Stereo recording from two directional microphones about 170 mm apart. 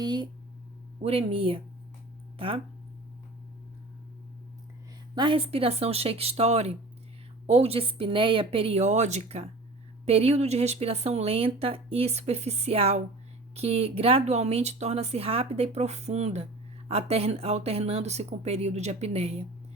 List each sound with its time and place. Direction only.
0.0 s speech: 25° right (ahead or behind)
5.1 s speech: 30° right (ahead or behind)